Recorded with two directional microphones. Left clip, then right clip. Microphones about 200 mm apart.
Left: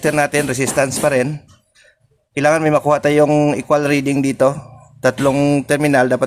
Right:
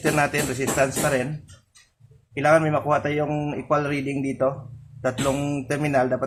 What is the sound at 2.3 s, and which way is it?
A man's voice, 55° left (ahead or behind).